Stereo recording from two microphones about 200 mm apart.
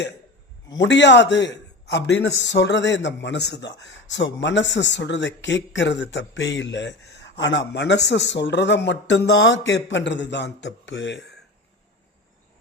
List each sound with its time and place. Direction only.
0.8 s a man's voice: 60° left (ahead or behind)